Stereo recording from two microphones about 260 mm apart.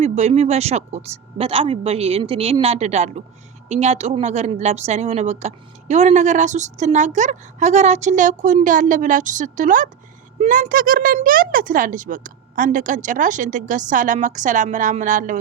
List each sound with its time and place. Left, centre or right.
0.0 s a woman's voice: right